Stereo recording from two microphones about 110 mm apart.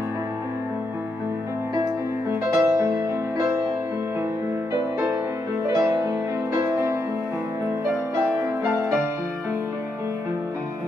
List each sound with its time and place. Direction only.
2.5 s music: 20° right (ahead or behind)
2.9 s music: 30° right (ahead or behind)
5.8 s music: 25° right (ahead or behind)